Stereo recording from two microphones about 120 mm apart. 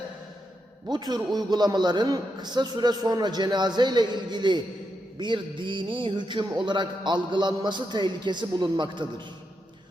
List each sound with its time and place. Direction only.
0.9 s a man's voice: 35° right (ahead or behind)